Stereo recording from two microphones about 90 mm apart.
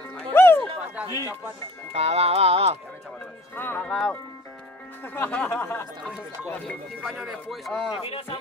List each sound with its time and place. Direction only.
0.3 s music: 25° left (ahead or behind)
1.0 s speech: 40° left (ahead or behind)
2.0 s speech: 90° right
3.5 s speech: 25° left (ahead or behind)
3.8 s speech: 5° left (ahead or behind)
5.0 s speech: 25° left (ahead or behind)
5.3 s speech: 15° left (ahead or behind)
5.6 s speech: 25° left (ahead or behind)
7.0 s speech: centre (ahead or behind)
7.9 s speech: 90° left